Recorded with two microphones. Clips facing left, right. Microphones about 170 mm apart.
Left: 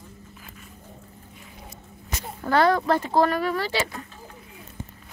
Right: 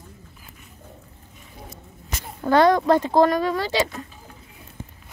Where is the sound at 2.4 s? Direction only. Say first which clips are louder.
Right 4 dB; 20° right (ahead or behind).